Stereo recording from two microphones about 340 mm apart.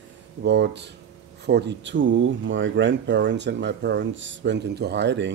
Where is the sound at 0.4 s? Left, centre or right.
Right.